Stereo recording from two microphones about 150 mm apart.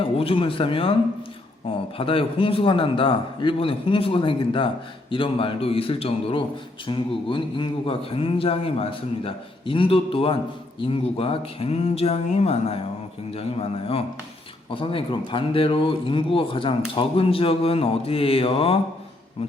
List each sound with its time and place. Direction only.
0.0 s speech: 40° left (ahead or behind)
2.0 s speech: 35° left (ahead or behind)